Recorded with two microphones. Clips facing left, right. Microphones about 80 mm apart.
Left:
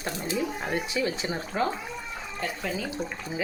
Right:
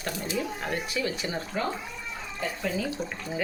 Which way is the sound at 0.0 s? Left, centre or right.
Left.